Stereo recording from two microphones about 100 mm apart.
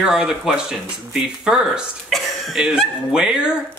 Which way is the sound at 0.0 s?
5° right (ahead or behind).